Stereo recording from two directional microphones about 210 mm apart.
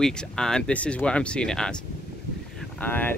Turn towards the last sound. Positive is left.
turn(degrees=10)  # may be behind; listen again after turning